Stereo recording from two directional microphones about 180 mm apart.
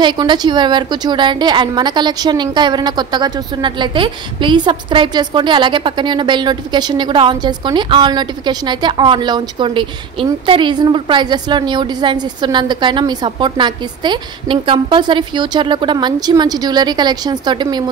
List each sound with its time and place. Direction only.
0.0 s a woman's voice: 25° right (ahead or behind)